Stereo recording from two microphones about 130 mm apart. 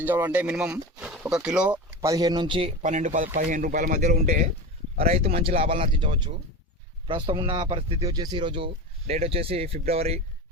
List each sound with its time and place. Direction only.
0.0 s speech: 15° right (ahead or behind)
2.0 s speech: 30° right (ahead or behind)
2.8 s speech: 70° right (ahead or behind)
4.9 s speech: 55° right (ahead or behind)
7.1 s speech: 40° right (ahead or behind)